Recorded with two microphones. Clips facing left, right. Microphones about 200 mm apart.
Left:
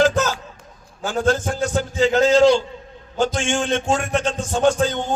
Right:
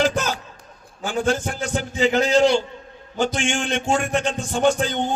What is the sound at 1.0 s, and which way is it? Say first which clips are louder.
Speech: left 2 dB; 15° right (ahead or behind).